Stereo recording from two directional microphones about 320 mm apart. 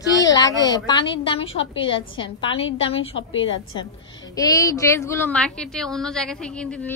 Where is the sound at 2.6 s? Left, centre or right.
Left.